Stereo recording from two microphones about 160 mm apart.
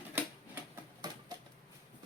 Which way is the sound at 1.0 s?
25° right (ahead or behind).